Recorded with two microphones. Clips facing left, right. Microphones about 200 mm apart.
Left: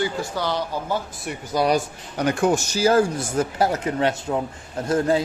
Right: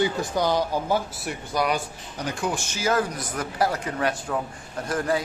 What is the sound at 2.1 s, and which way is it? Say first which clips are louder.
Speech: left 8 dB; 60° left (ahead or behind).